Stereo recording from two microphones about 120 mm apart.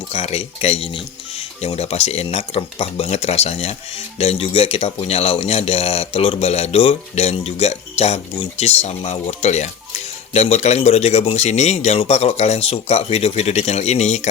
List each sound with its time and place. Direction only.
0.1 s speech: 60° left (ahead or behind)